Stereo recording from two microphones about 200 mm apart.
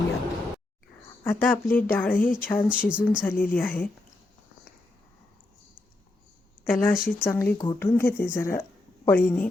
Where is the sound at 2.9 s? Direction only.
5° right (ahead or behind).